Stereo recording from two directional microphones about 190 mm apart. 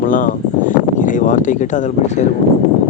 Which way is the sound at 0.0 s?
45° left (ahead or behind).